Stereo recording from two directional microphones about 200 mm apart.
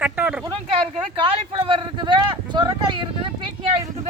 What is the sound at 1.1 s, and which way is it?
Speech, 25° right (ahead or behind).